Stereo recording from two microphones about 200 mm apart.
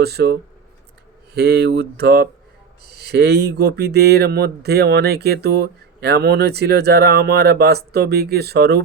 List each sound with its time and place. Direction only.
0.0 s speech: 55° right (ahead or behind)